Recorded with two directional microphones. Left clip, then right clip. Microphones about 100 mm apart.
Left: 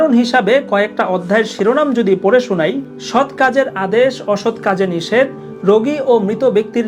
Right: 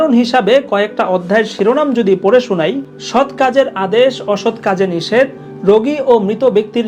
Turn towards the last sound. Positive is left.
turn(degrees=40)  # may be behind; listen again after turning